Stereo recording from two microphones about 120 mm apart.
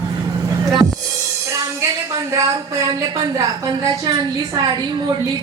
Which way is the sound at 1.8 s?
25° right (ahead or behind).